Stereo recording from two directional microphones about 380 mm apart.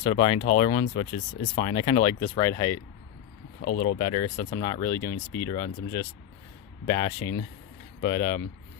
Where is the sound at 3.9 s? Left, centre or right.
Centre.